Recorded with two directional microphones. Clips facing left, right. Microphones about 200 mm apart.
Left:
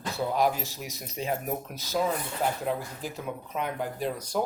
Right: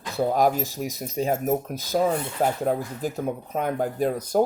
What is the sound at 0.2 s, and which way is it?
Speech, 45° right (ahead or behind).